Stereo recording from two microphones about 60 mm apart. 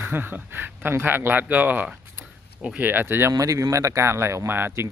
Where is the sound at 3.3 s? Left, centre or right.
Right.